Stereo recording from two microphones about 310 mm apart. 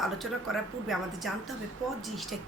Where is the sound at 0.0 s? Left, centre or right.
Centre.